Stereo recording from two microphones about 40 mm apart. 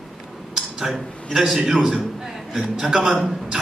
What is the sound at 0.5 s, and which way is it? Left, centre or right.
Speech, centre.